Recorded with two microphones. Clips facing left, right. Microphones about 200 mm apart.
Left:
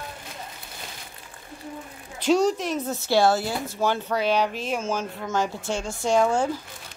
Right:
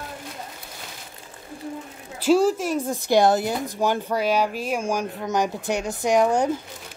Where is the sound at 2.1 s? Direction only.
5° right (ahead or behind).